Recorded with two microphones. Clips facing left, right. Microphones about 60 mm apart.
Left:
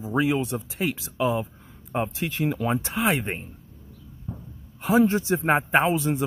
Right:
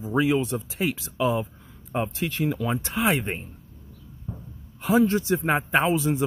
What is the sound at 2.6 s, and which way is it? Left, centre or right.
Speech, left.